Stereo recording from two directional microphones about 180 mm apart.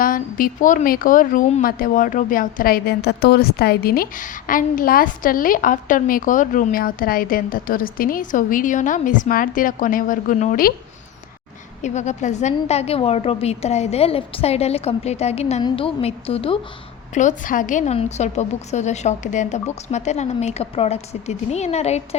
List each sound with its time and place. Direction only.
0.0 s a woman's voice: 50° left (ahead or behind)
11.8 s a woman's voice: 40° left (ahead or behind)
17.2 s a woman's voice: 45° left (ahead or behind)